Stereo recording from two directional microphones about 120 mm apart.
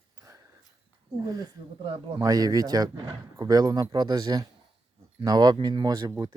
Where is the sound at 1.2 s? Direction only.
35° right (ahead or behind).